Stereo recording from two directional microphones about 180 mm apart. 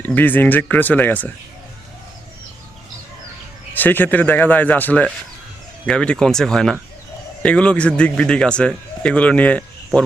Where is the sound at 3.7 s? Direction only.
10° left (ahead or behind).